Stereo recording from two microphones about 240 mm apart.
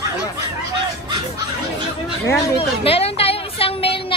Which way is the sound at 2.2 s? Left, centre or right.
Centre.